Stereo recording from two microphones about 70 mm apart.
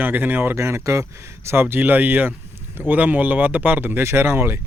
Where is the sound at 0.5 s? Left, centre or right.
Right.